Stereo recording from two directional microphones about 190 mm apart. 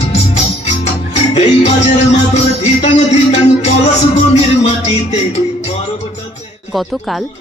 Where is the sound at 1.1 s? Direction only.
35° left (ahead or behind).